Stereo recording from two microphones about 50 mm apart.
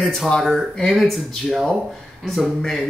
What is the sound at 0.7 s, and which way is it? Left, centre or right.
Speech, centre.